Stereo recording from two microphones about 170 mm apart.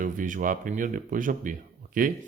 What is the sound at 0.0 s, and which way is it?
Speech, 50° right (ahead or behind).